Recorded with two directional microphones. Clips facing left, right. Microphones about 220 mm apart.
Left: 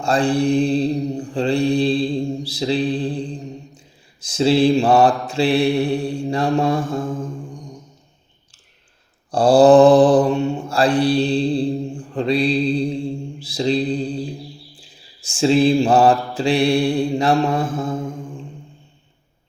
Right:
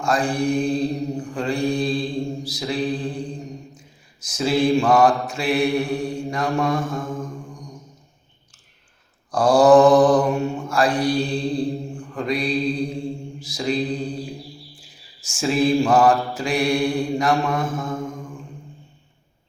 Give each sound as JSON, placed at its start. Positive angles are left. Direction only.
{"t": 0.0, "sound": "mantra", "side_deg": 30}
{"t": 4.2, "sound": "mantra", "side_deg": 30}
{"t": 9.3, "sound": "mantra", "side_deg": 30}